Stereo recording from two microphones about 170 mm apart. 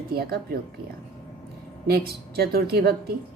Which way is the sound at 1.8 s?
65° right (ahead or behind).